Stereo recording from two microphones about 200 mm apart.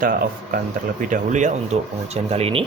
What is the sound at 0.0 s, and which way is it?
Speech, 45° right (ahead or behind).